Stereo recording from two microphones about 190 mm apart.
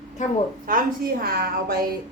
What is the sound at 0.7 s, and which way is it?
A woman's voice, 50° right (ahead or behind).